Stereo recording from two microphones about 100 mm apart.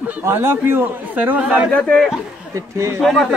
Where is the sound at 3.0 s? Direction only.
Centre (ahead or behind).